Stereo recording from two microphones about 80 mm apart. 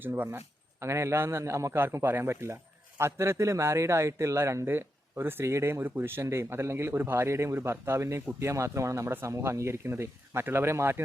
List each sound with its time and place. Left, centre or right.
0.0 s speech: right